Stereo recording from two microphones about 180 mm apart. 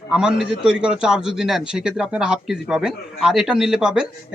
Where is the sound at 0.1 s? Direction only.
5° right (ahead or behind).